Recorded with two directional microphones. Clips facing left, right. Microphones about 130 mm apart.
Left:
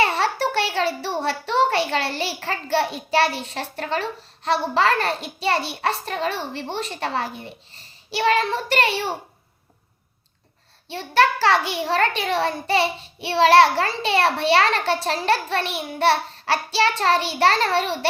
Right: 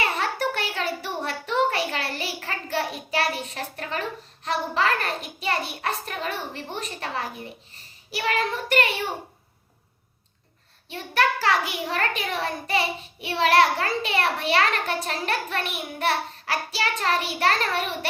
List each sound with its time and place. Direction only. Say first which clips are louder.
0.0 s a child's voice: left 5 dB; 30° left (ahead or behind)
10.8 s a child's voice: left 5 dB; 30° left (ahead or behind)